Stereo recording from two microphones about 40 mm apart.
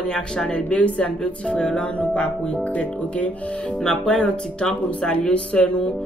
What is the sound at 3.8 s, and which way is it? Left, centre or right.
Music, centre.